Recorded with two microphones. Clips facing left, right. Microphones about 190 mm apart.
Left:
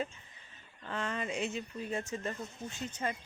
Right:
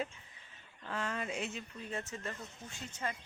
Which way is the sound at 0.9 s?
5° right (ahead or behind).